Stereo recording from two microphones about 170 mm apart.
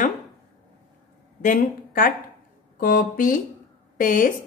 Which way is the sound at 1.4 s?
55° left (ahead or behind).